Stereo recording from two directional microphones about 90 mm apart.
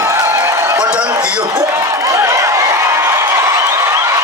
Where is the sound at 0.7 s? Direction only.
10° right (ahead or behind).